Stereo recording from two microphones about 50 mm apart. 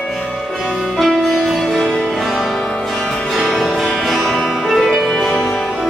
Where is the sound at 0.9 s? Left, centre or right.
Centre.